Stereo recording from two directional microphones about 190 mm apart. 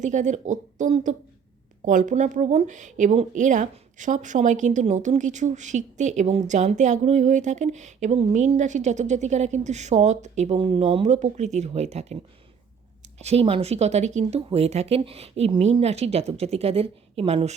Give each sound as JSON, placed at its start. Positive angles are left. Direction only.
{"t": 0.0, "sound": "speech", "side_deg": -40}
{"t": 13.1, "sound": "speech", "side_deg": -35}